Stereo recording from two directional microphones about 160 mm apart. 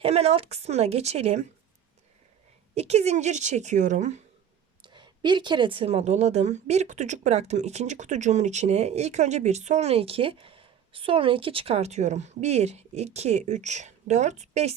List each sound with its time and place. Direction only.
0.0 s a woman's voice: 40° right (ahead or behind)
2.7 s a woman's voice: 40° right (ahead or behind)
4.8 s a woman's voice: 30° right (ahead or behind); by 14.7 s 45° right (ahead or behind)